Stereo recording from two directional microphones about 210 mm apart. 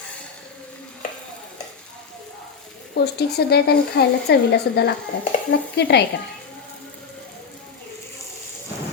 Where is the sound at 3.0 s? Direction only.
50° left (ahead or behind).